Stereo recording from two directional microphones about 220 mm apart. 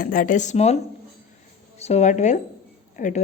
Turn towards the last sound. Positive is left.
turn(degrees=35)  # may be behind; listen again after turning